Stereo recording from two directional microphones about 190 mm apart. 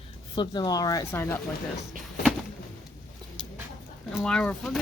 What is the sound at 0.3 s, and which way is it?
Speech, 20° left (ahead or behind).